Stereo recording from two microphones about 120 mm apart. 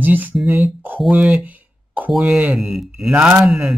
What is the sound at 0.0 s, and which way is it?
Speech, 15° right (ahead or behind).